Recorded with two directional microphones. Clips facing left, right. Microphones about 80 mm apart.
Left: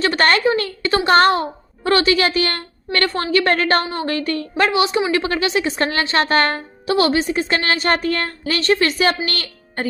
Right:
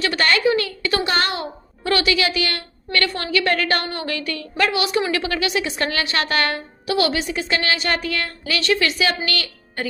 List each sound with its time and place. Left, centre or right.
0.0 s a woman's voice: left
1.0 s a woman's voice: left